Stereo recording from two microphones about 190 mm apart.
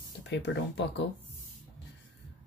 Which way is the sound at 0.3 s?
65° left (ahead or behind).